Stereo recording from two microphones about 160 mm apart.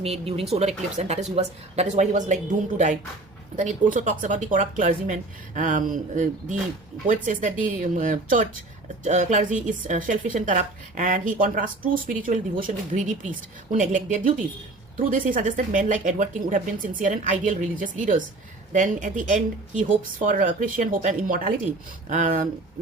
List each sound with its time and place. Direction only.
0.0 s a woman's voice: 40° right (ahead or behind); by 22.4 s 55° right (ahead or behind)